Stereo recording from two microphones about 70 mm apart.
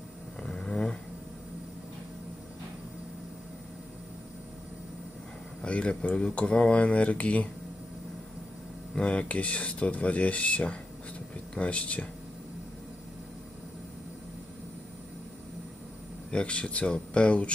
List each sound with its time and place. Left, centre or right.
0.4 s snoring: centre
5.6 s speech: centre
8.9 s speech: centre
16.3 s speech: centre